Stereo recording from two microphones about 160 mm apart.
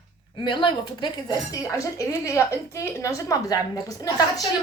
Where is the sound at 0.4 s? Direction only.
30° left (ahead or behind).